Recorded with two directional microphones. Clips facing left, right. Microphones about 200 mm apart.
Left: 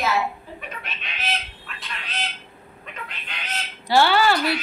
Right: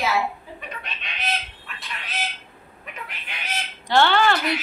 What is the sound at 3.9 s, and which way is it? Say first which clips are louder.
Speech: left 1 dB; 5° left (ahead or behind).